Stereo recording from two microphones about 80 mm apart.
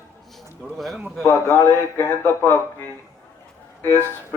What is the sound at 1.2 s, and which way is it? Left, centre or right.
A man's voice, left.